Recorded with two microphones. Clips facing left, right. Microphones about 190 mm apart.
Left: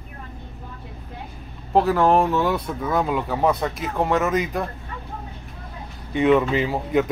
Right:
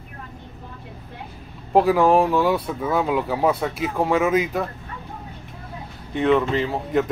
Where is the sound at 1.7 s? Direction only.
10° right (ahead or behind).